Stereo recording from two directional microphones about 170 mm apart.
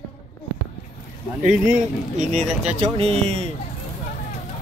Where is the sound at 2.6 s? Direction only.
35° right (ahead or behind).